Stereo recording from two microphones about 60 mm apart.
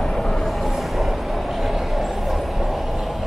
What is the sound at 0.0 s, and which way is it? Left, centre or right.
Vehicle, centre.